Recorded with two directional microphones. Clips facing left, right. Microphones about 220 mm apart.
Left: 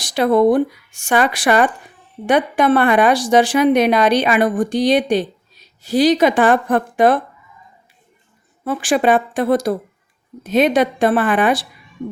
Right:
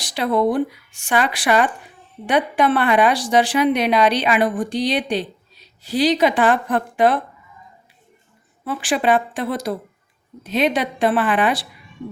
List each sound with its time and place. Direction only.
0.0 s a woman's voice: 45° left (ahead or behind)
8.6 s a woman's voice: 45° left (ahead or behind)